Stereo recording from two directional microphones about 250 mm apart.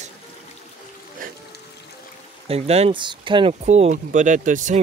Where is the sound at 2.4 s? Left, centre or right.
Right.